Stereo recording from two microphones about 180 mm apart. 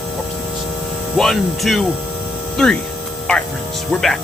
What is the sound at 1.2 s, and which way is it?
Speech, centre (ahead or behind).